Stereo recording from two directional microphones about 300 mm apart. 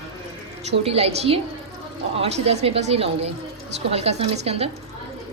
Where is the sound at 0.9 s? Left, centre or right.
Centre.